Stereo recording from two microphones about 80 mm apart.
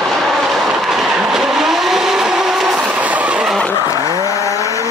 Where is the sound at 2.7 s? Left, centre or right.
Centre.